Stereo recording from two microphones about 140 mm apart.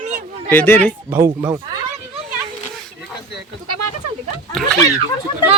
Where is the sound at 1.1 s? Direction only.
25° right (ahead or behind).